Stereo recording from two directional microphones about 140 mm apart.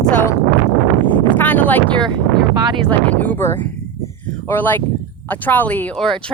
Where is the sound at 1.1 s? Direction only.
10° left (ahead or behind).